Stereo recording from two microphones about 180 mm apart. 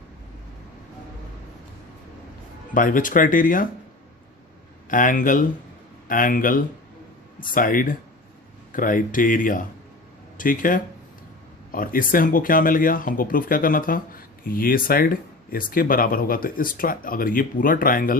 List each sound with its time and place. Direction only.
2.7 s speech: 50° left (ahead or behind)
4.9 s speech: 45° left (ahead or behind)